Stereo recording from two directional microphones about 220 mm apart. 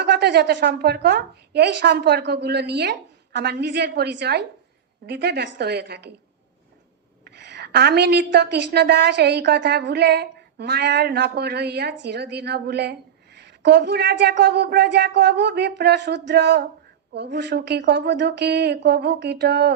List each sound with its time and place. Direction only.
0.0 s a woman's voice: 50° right (ahead or behind)
7.3 s a woman's voice: 50° right (ahead or behind)